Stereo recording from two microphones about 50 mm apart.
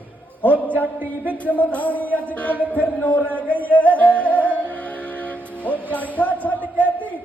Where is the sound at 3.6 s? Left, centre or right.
Left.